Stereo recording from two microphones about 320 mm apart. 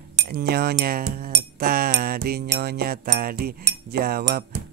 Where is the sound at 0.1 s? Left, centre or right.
Right.